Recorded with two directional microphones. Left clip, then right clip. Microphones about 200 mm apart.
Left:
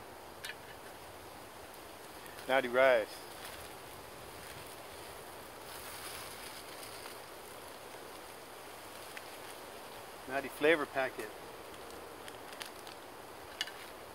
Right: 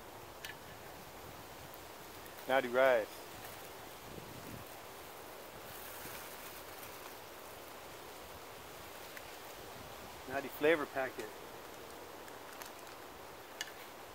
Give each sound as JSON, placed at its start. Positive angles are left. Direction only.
{"t": 2.4, "sound": "speech", "side_deg": -15}
{"t": 10.3, "sound": "speech", "side_deg": -5}